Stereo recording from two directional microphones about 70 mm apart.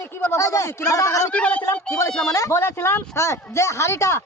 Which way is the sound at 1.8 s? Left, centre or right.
Left.